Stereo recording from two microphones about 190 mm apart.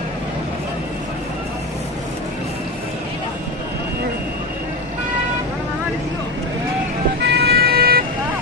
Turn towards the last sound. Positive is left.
turn(degrees=-55)  # may be behind; listen again after turning